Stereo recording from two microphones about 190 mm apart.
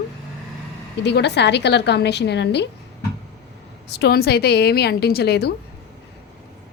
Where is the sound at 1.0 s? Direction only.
65° left (ahead or behind).